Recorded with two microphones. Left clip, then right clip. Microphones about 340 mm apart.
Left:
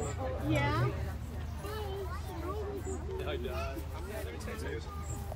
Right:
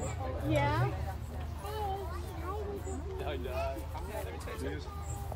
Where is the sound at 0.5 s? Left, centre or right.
Right.